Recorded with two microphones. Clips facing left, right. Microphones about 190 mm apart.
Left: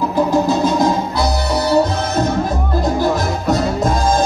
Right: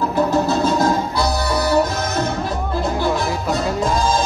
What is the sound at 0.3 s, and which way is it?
Music, 15° left (ahead or behind).